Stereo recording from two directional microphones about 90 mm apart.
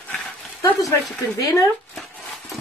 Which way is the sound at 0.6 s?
40° left (ahead or behind).